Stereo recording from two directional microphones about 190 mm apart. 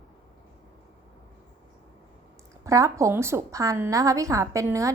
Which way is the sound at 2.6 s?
15° right (ahead or behind).